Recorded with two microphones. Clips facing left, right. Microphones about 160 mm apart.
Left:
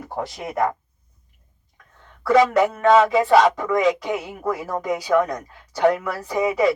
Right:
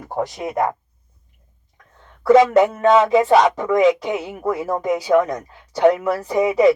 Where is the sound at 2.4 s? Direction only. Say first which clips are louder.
Right 3 dB; 25° right (ahead or behind).